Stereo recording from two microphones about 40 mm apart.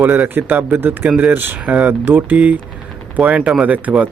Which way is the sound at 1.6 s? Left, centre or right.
Right.